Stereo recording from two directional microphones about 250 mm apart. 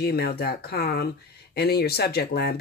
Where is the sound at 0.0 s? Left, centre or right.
Left.